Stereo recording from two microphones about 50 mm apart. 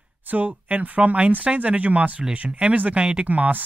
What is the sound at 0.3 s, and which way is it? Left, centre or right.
Speech, right.